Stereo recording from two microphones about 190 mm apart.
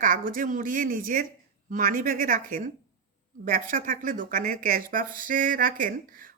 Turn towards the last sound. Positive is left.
turn(degrees=-45)  # may be behind; listen again after turning